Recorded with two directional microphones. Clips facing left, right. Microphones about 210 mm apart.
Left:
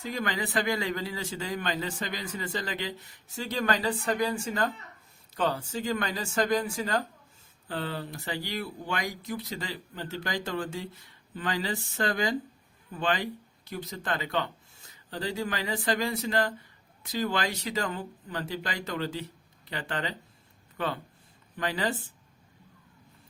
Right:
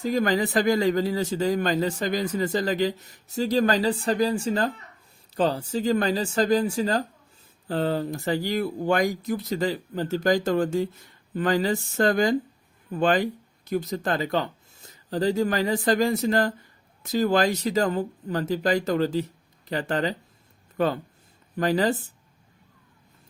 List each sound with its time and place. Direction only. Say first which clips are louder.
0.0 s speech: right 9 dB; 40° right (ahead or behind)